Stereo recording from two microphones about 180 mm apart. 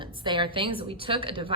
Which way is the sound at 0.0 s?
25° right (ahead or behind).